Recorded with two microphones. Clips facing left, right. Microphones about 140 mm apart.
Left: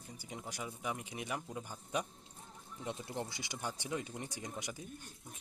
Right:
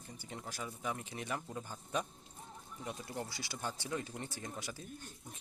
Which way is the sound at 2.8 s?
25° left (ahead or behind).